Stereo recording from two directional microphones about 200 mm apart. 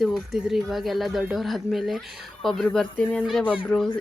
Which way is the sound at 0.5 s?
Centre (ahead or behind).